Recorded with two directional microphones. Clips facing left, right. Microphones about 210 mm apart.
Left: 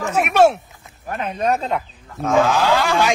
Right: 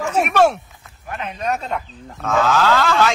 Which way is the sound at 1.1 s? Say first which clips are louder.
Left 4 dB; 40° left (ahead or behind).